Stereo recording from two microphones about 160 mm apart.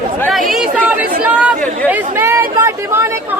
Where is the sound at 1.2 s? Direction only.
10° right (ahead or behind).